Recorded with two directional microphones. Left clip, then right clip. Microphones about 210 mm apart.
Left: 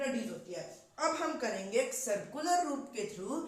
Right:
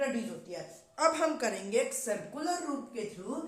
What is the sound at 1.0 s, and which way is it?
Speech, 55° right (ahead or behind).